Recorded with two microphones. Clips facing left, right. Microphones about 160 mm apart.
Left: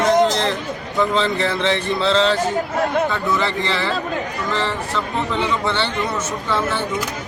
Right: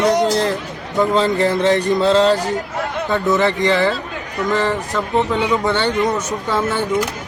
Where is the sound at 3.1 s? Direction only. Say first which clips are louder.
Right 5 dB; 50° right (ahead or behind).